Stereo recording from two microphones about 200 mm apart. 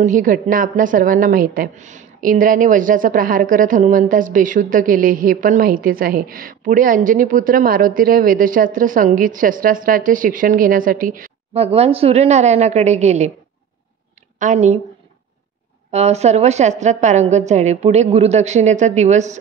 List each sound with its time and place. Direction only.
0.0 s a woman's voice: 40° right (ahead or behind)
14.4 s a woman's voice: 35° right (ahead or behind)
15.9 s a woman's voice: 35° right (ahead or behind)